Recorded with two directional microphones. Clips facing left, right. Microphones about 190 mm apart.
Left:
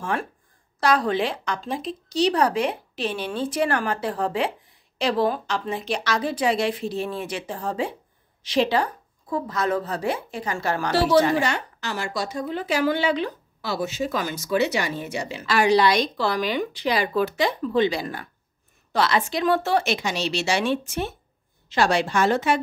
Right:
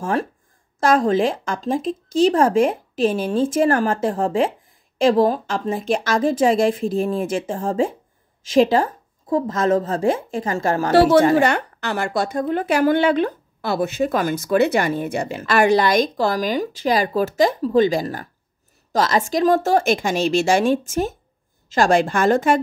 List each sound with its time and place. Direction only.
0.0 s a woman's voice: 40° right (ahead or behind)